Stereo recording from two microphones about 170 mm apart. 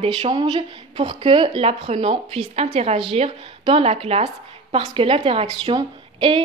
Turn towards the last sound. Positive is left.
turn(degrees=-30)  # may be behind; listen again after turning